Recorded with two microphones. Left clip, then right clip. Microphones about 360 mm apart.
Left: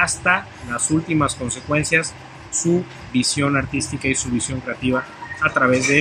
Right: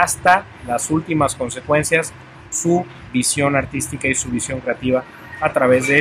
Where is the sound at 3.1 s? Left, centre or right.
Centre.